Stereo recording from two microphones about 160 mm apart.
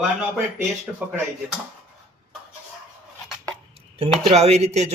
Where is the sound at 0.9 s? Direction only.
15° right (ahead or behind).